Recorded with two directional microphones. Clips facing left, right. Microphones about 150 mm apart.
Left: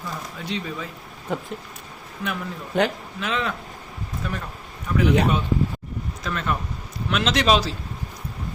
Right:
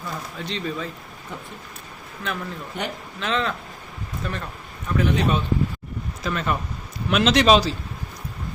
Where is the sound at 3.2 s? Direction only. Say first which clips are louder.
Right 2 dB; 10° left (ahead or behind).